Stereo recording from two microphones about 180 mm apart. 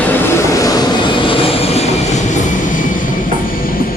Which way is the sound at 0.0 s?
10° left (ahead or behind).